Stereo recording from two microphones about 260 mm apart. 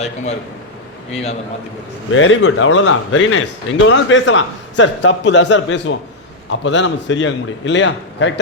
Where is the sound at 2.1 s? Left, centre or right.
Left.